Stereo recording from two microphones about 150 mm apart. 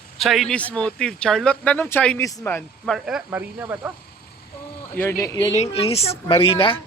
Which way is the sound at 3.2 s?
15° right (ahead or behind).